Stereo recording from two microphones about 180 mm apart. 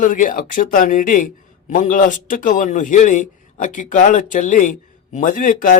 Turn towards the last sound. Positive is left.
turn(degrees=50)  # may be behind; listen again after turning